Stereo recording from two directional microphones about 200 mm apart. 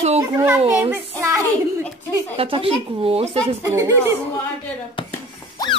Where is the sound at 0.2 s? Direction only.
15° right (ahead or behind).